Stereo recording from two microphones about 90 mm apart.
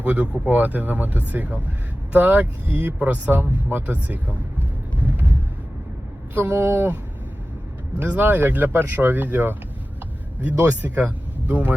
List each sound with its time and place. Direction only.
0.0 s speech: 20° right (ahead or behind)
6.3 s speech: 25° right (ahead or behind)